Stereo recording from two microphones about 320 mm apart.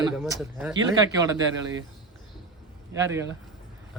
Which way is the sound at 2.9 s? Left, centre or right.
Centre.